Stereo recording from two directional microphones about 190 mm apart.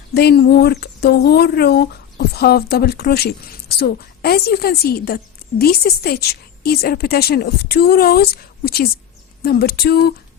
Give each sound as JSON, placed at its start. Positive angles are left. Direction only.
{"t": 0.1, "sound": "speech", "side_deg": 55}